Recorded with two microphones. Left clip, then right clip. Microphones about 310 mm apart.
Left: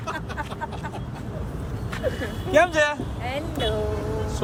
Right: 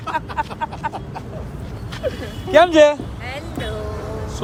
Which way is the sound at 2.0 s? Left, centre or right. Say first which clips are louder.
Right 3 dB; centre.